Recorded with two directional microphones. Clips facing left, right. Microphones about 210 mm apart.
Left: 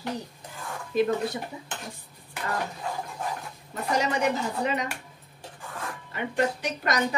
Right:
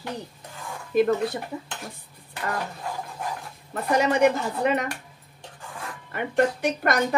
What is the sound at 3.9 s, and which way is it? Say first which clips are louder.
Speech: right 6 dB; 55° right (ahead or behind).